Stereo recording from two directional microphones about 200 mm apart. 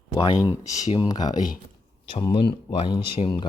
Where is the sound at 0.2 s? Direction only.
20° left (ahead or behind).